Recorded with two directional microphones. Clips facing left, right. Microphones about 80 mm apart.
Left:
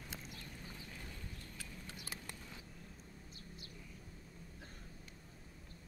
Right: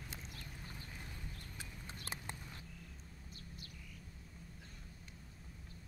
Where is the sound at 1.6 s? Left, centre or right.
Right.